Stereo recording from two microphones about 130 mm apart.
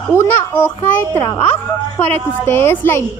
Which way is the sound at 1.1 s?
25° left (ahead or behind).